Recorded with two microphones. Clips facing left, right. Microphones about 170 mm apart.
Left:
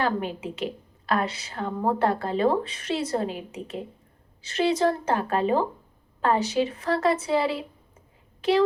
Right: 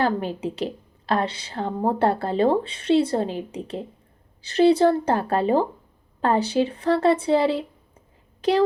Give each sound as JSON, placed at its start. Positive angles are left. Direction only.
{"t": 0.0, "sound": "a woman's voice", "side_deg": -35}